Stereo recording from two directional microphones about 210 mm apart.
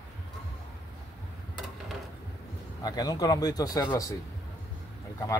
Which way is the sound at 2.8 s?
20° left (ahead or behind).